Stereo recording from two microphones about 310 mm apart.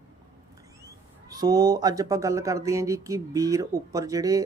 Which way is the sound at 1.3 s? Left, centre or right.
Centre.